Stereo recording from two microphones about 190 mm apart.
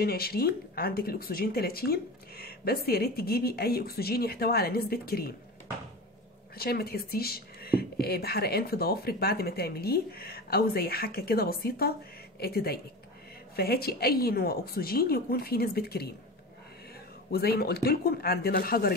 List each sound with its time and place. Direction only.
0.0 s speech: 55° left (ahead or behind)
6.5 s speech: 55° left (ahead or behind)
17.3 s speech: 55° left (ahead or behind)